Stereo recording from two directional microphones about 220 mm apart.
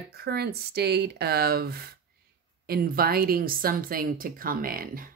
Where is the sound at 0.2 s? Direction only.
45° right (ahead or behind).